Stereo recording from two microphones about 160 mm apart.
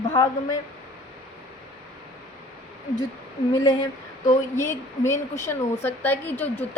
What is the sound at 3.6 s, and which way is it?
A woman's voice, 20° left (ahead or behind).